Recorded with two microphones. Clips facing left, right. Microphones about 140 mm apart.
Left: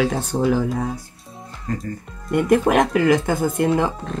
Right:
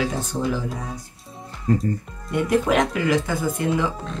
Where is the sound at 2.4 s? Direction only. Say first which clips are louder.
Left 3 dB; 55° left (ahead or behind).